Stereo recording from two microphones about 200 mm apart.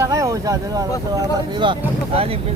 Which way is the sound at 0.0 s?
15° right (ahead or behind).